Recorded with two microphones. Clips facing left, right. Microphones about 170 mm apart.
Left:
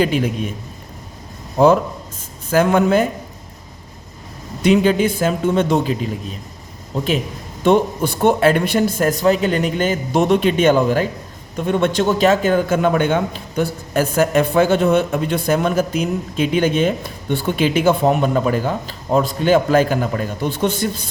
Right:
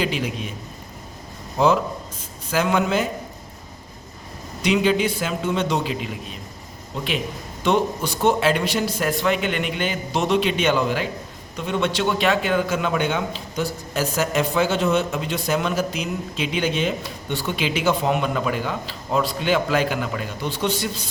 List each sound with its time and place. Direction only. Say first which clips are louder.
0.0 s a man's voice: left 7 dB; 50° left (ahead or behind)
1.5 s a man's voice: left 6 dB; 50° left (ahead or behind)
4.6 s a man's voice: left 5 dB; 45° left (ahead or behind)